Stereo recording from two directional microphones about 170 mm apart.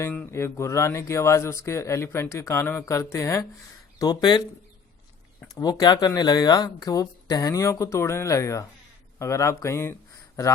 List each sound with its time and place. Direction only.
0.0 s speech: 10° left (ahead or behind)
5.5 s speech: 20° left (ahead or behind)